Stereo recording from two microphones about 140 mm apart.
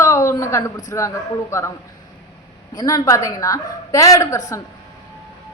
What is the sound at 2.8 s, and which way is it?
A woman's voice, 25° left (ahead or behind).